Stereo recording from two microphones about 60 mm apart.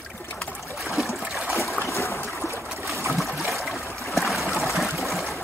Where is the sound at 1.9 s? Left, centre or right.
Left.